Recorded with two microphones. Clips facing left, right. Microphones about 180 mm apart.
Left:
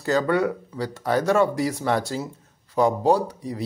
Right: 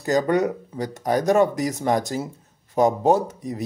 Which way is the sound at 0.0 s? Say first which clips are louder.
Right 1 dB; 15° right (ahead or behind).